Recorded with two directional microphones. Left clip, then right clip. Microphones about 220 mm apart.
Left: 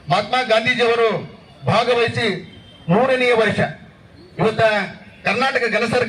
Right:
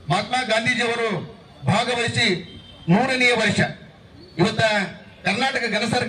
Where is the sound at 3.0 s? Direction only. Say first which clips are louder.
Left 3 dB; 15° left (ahead or behind).